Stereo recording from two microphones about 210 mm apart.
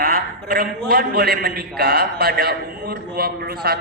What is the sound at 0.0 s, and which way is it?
A man's voice, 45° right (ahead or behind).